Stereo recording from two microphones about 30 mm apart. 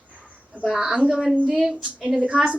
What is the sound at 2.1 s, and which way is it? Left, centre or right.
Speech, right.